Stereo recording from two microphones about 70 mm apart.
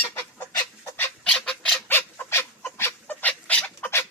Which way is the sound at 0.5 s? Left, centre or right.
Left.